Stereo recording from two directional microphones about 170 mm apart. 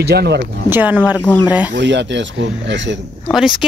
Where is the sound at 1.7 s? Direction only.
90° right.